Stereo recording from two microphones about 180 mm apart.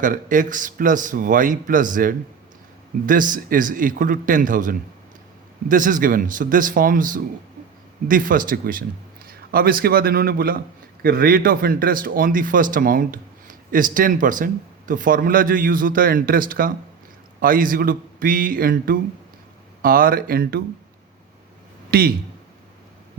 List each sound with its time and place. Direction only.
0.0 s a man's voice: 50° right (ahead or behind)
21.8 s speech: 55° right (ahead or behind)